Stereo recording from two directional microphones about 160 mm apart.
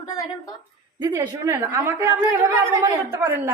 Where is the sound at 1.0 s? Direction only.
25° right (ahead or behind).